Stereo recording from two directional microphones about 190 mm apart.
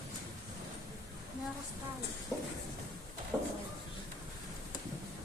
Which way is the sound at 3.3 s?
15° right (ahead or behind).